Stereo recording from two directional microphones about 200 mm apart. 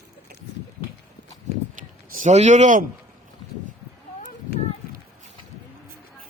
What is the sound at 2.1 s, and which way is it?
Speech, 40° right (ahead or behind).